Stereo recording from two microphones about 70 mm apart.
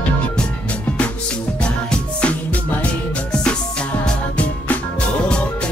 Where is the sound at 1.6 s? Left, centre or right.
Centre.